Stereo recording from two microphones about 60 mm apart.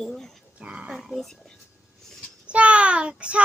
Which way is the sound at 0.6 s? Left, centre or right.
Centre.